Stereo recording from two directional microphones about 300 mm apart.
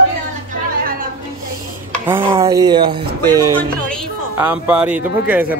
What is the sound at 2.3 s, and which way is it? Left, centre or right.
A man's voice, centre.